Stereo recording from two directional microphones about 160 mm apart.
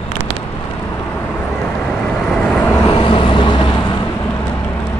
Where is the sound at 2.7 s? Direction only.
25° left (ahead or behind).